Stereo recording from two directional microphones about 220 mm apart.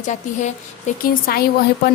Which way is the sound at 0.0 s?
35° left (ahead or behind).